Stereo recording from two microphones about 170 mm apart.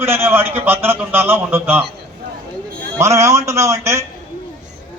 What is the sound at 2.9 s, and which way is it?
A man's voice, 15° right (ahead or behind).